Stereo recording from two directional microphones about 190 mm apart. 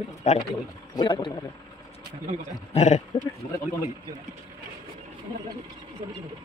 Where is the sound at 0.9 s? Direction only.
25° left (ahead or behind).